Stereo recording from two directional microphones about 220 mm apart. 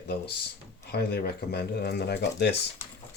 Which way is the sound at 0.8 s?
45° left (ahead or behind).